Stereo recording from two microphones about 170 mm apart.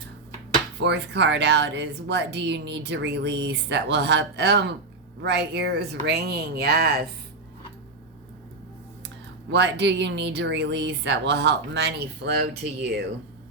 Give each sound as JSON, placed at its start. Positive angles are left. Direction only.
{"t": 0.8, "sound": "speech", "side_deg": -90}
{"t": 9.5, "sound": "speech", "side_deg": -90}